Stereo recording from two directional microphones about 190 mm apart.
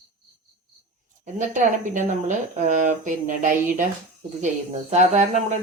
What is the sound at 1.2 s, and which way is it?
Speech, 40° right (ahead or behind).